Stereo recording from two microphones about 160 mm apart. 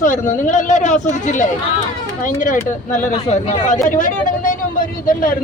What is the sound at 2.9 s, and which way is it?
Speech, 45° left (ahead or behind).